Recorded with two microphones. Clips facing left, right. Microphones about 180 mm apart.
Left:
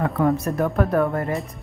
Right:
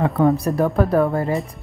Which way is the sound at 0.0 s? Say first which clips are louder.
Right 3 dB; 30° right (ahead or behind).